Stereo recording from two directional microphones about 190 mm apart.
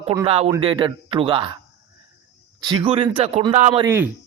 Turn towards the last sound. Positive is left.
turn(degrees=-10)  # may be behind; listen again after turning